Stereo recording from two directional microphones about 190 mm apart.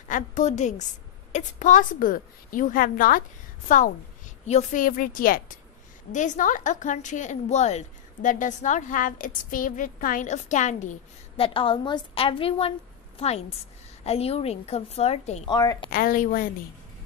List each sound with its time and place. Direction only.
0.1 s a woman's voice: 40° left (ahead or behind)
15.4 s a woman's voice: 20° left (ahead or behind)
15.9 s a woman's voice: 50° left (ahead or behind)